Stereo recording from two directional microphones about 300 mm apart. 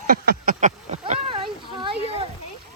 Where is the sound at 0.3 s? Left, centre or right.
Right.